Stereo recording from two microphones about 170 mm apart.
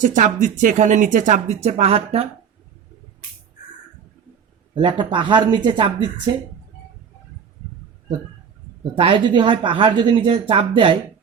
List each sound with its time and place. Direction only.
0.0 s speech: 45° right (ahead or behind)
4.7 s speech: 30° right (ahead or behind)
9.0 s speech: 30° right (ahead or behind)